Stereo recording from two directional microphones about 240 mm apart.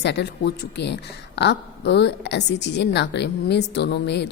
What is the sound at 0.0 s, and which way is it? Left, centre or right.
A woman's voice, left.